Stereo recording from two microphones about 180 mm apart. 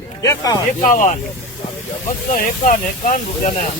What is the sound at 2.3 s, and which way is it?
Speech, 45° left (ahead or behind).